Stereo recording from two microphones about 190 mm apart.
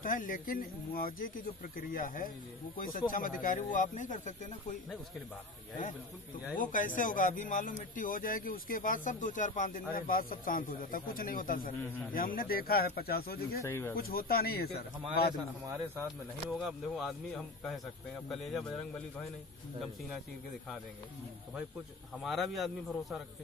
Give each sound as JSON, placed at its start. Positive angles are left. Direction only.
{"t": 0.0, "sound": "speech", "side_deg": 45}
{"t": 6.5, "sound": "speech", "side_deg": 45}
{"t": 13.6, "sound": "speech", "side_deg": 15}
{"t": 13.9, "sound": "speech", "side_deg": 50}
{"t": 16.4, "sound": "speech", "side_deg": 0}
{"t": 22.2, "sound": "speech", "side_deg": 0}